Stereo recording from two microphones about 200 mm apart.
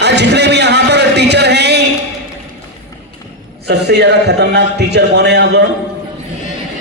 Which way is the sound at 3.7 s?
55° right (ahead or behind).